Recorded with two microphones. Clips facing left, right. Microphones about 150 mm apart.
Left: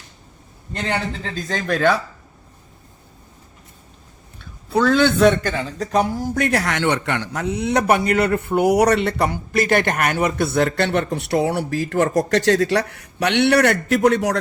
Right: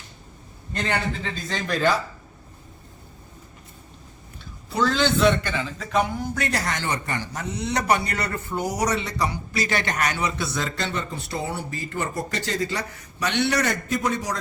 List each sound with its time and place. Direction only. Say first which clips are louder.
1.2 s speech: left 4 dB; 45° left (ahead or behind)
4.7 s a man's voice: left 6 dB; 55° left (ahead or behind); by 6.4 s 40° left (ahead or behind)
6.4 s a man's voice: left 9 dB; 60° left (ahead or behind)